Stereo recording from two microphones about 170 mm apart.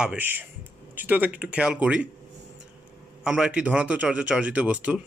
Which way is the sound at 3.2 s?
5° right (ahead or behind).